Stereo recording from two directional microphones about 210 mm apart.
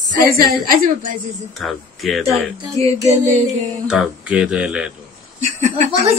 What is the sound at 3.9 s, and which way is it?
Speech, 5° right (ahead or behind).